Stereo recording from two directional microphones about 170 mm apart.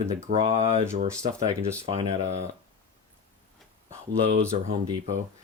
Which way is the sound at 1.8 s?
40° right (ahead or behind).